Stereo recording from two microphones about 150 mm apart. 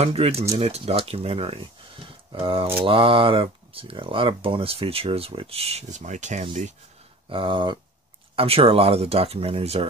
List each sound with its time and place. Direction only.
0.0 s speech: 40° right (ahead or behind)
7.2 s speech: 35° right (ahead or behind)